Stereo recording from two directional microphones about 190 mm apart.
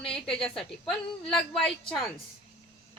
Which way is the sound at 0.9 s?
5° left (ahead or behind).